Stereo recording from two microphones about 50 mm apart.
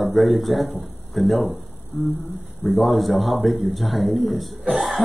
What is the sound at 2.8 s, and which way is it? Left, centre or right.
Speech, centre.